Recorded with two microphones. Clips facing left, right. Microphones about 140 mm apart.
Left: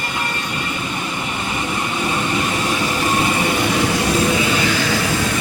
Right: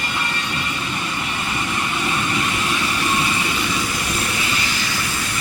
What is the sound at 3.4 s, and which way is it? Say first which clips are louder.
Vehicle: left 6 dB; 55° left (ahead or behind).